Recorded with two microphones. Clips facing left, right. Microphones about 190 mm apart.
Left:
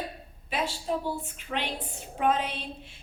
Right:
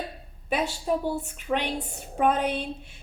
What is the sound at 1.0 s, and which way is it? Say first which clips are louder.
A woman's voice: right 4 dB; 50° right (ahead or behind).